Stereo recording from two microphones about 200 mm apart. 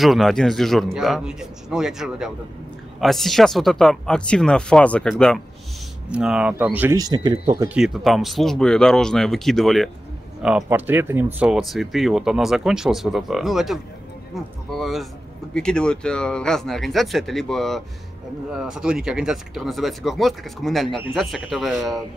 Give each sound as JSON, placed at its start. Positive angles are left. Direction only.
{"t": 0.0, "sound": "speech", "side_deg": 0}
{"t": 7.6, "sound": "speech", "side_deg": -5}